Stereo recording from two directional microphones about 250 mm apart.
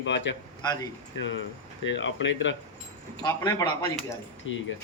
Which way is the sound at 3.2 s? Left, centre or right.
Centre.